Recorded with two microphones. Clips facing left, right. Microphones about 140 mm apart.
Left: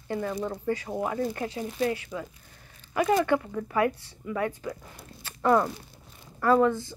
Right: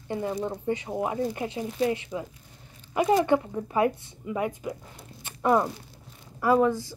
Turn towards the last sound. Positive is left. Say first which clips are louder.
# even
turn(degrees=-10)  # may be behind; listen again after turning